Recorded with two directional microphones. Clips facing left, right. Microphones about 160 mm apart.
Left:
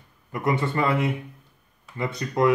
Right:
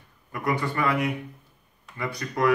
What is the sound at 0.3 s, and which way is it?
Speech, 25° left (ahead or behind).